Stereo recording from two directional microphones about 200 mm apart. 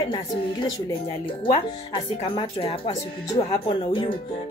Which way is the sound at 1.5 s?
25° left (ahead or behind).